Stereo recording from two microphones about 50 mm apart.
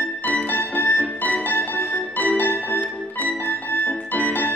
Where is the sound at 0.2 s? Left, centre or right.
Left.